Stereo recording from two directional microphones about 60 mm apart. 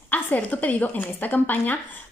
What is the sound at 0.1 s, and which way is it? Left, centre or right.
Speech, left.